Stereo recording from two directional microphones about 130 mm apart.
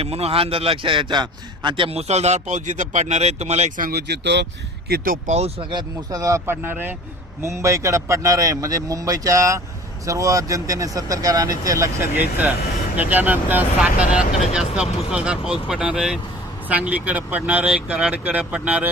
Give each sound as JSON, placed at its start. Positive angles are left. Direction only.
{"t": 0.0, "sound": "a man's voice", "side_deg": -50}
{"t": 5.0, "sound": "speech", "side_deg": -70}
{"t": 6.1, "sound": "speech", "side_deg": -25}